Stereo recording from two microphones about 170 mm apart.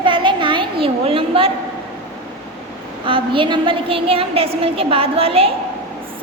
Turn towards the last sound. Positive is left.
turn(degrees=-35)  # may be behind; listen again after turning